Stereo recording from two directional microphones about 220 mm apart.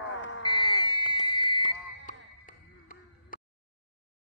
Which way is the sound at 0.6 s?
20° left (ahead or behind).